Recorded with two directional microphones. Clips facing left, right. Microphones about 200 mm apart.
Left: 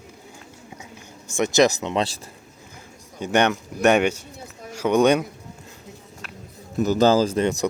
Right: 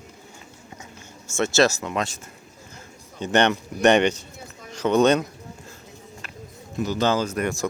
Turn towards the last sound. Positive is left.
turn(degrees=20)  # may be behind; listen again after turning